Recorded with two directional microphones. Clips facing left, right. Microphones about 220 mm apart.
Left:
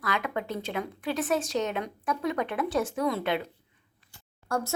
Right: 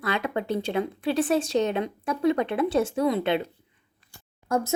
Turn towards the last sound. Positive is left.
turn(degrees=-20)  # may be behind; listen again after turning